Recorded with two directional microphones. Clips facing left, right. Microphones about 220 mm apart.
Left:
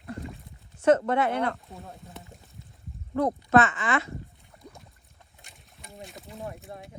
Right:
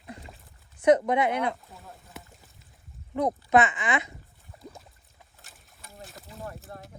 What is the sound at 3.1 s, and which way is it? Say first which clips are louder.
Speech: left 1 dB; 15° right (ahead or behind).